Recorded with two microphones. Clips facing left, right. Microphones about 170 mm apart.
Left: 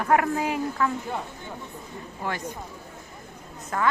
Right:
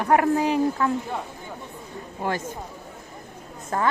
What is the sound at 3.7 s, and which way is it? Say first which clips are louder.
Speech: right 2 dB; 35° right (ahead or behind).